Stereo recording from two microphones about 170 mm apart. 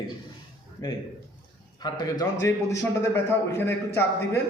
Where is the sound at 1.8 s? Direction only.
25° left (ahead or behind).